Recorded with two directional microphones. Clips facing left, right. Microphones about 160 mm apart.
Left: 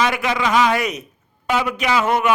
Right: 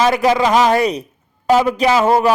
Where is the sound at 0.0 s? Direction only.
35° right (ahead or behind).